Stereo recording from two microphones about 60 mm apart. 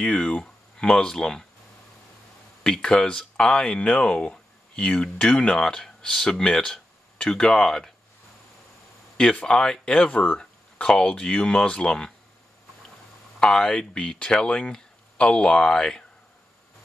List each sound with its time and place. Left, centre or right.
0.0 s speech: centre
2.6 s speech: centre
9.1 s speech: centre
13.4 s speech: centre